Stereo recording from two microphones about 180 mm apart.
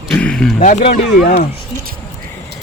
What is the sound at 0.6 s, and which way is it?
Speech, 45° left (ahead or behind).